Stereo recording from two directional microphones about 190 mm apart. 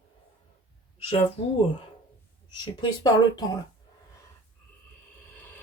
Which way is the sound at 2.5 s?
20° left (ahead or behind).